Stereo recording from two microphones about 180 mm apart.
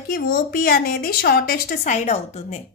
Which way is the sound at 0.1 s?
60° left (ahead or behind).